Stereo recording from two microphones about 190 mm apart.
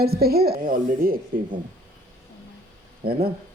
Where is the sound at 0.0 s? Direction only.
55° right (ahead or behind).